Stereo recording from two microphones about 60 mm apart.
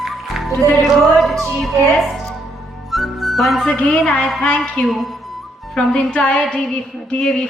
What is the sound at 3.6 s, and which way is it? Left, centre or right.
A woman's voice, centre.